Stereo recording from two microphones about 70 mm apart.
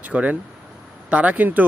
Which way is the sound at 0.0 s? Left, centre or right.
Right.